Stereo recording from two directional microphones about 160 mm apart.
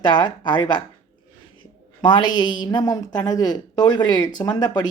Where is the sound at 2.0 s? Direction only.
30° left (ahead or behind).